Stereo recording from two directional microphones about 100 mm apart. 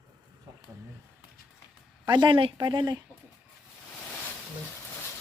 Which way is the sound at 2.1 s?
50° right (ahead or behind).